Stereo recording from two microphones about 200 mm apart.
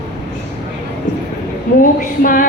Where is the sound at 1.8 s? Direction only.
45° left (ahead or behind).